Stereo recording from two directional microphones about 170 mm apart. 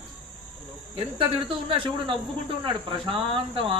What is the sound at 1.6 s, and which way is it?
Speech, 30° right (ahead or behind).